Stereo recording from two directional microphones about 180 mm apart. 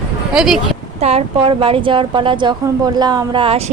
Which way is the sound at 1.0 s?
30° right (ahead or behind).